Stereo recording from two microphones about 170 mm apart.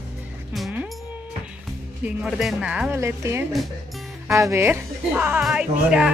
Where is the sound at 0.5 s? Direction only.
Centre (ahead or behind).